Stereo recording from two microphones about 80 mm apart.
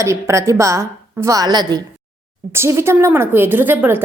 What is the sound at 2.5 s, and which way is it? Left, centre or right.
A woman's voice, right.